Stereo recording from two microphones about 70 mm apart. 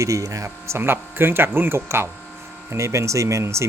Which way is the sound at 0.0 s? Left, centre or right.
Right.